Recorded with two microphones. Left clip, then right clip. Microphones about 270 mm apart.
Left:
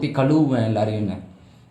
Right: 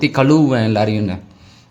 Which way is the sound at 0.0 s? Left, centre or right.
Right.